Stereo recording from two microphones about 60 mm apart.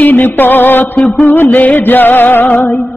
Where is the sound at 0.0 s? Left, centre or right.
Left.